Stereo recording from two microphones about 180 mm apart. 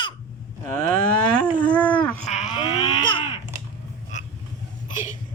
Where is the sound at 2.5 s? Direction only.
35° left (ahead or behind).